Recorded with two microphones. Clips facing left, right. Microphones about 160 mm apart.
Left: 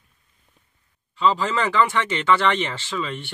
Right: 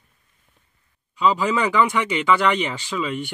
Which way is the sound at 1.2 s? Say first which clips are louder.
Right 1 dB; 15° right (ahead or behind).